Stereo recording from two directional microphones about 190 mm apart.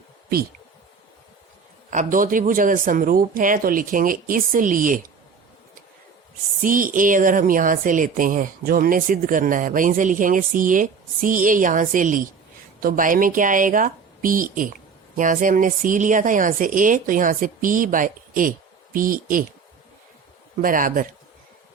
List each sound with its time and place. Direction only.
1.9 s speech: 45° right (ahead or behind)
6.6 s speech: 45° right (ahead or behind)
20.6 s speech: 45° right (ahead or behind)